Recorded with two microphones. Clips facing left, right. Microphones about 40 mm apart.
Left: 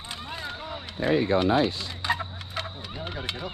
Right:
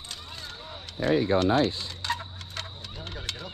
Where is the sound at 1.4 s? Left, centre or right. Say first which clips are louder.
Left 1 dB; centre.